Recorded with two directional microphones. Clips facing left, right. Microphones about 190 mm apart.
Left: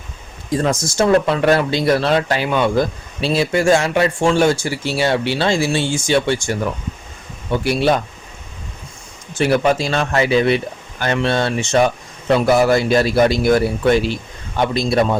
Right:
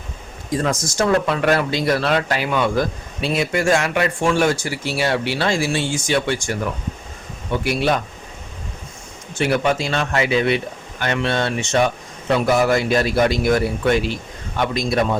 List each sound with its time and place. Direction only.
0.6 s speech: 30° left (ahead or behind)
7.6 s a man's voice: 30° left (ahead or behind)
9.4 s a man's voice: 35° left (ahead or behind)